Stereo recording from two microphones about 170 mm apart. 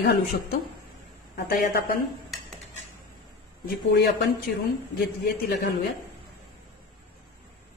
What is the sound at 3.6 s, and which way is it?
Speech, 65° left (ahead or behind).